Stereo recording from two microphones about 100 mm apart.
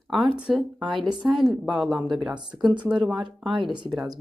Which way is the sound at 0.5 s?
Centre (ahead or behind).